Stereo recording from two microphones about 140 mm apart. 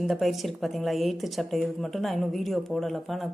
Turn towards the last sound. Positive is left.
turn(degrees=0)  # may be behind; listen again after turning